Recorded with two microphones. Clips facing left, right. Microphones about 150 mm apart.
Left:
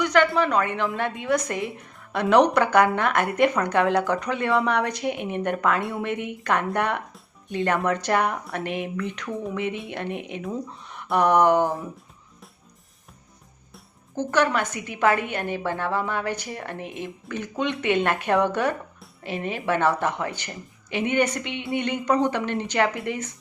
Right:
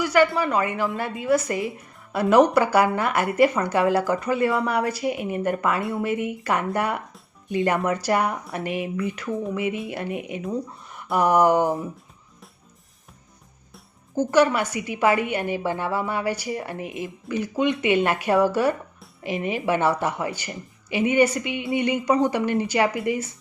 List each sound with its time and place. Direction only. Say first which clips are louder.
0.0 s a woman's voice: even; 5° right (ahead or behind)
13.7 s a woman's voice: right 5 dB; 10° right (ahead or behind)